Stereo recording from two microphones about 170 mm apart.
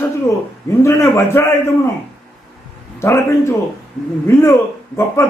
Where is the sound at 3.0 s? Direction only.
15° left (ahead or behind).